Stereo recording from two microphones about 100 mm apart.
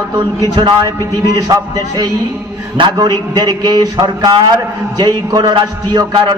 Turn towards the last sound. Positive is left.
turn(degrees=-45)  # may be behind; listen again after turning